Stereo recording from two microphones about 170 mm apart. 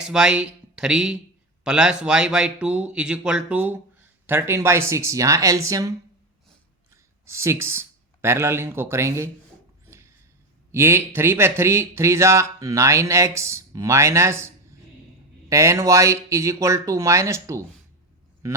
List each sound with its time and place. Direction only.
0.0 s speech: 5° right (ahead or behind)
6.9 s speech: 15° right (ahead or behind)
9.8 s a sound: 15° right (ahead or behind)
10.7 s a man's voice: 15° right (ahead or behind)